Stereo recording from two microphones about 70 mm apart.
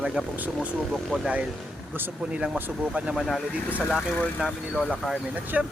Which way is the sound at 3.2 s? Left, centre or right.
Centre.